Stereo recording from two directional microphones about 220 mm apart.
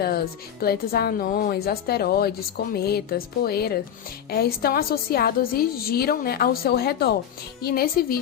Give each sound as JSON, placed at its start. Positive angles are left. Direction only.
{"t": 0.6, "sound": "a woman's voice", "side_deg": 45}